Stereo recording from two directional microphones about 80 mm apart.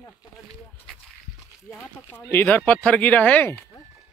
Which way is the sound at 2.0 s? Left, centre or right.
Left.